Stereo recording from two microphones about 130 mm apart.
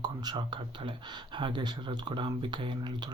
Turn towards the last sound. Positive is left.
turn(degrees=-35)  # may be behind; listen again after turning